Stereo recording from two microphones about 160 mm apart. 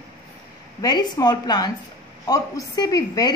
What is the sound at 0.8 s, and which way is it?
A woman's voice, 25° left (ahead or behind).